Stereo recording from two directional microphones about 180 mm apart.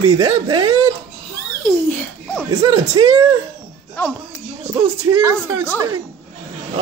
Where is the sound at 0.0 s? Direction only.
20° right (ahead or behind).